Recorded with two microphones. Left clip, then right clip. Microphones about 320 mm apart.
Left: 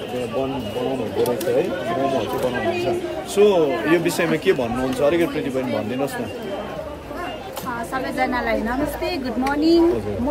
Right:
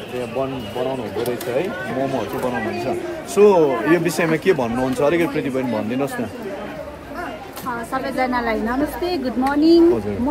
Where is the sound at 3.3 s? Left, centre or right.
Centre.